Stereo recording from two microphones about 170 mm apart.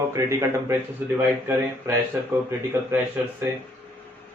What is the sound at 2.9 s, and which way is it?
Speech, 15° right (ahead or behind).